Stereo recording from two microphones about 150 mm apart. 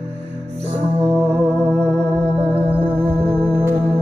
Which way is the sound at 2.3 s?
40° right (ahead or behind).